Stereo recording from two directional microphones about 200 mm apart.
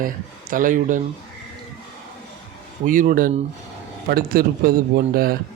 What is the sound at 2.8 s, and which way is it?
A man's voice, 45° right (ahead or behind).